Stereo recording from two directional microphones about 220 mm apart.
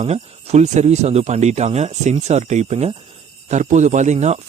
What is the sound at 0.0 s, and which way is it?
Speech, 30° right (ahead or behind).